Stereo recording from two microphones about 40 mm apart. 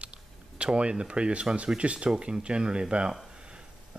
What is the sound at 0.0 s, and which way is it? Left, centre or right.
Speech, right.